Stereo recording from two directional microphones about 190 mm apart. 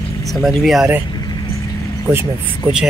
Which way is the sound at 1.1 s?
20° left (ahead or behind).